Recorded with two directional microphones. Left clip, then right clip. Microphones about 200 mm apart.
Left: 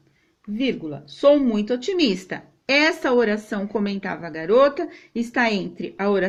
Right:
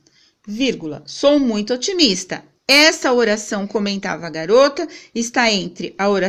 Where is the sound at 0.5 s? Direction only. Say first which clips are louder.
Right 4 dB; 50° right (ahead or behind).